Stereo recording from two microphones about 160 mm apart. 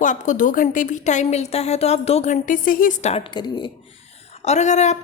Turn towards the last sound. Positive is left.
turn(degrees=45)  # may be behind; listen again after turning